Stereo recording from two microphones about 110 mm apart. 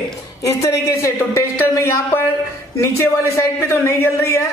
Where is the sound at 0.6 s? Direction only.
30° left (ahead or behind).